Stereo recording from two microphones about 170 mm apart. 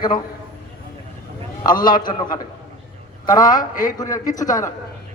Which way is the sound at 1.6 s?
25° left (ahead or behind).